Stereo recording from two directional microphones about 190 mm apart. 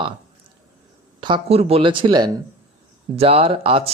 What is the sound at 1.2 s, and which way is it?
A man's voice, 25° right (ahead or behind).